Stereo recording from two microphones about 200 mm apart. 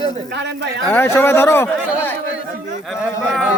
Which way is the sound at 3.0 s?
5° right (ahead or behind).